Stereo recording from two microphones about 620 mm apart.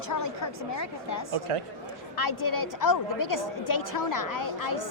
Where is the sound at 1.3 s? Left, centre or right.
Right.